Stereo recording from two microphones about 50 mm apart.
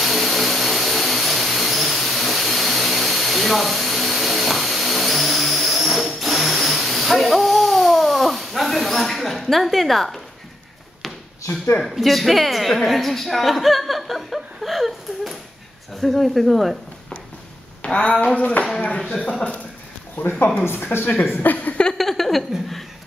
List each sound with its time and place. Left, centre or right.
0.0 s vehicle: centre
11.8 s a woman's voice: centre
17.8 s speech: left
20.9 s a woman's voice: left
21.9 s a sound: centre